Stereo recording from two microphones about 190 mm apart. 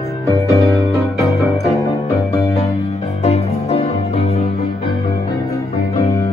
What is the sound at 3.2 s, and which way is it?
Music, 35° left (ahead or behind).